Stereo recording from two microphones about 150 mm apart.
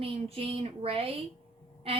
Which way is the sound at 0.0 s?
40° right (ahead or behind).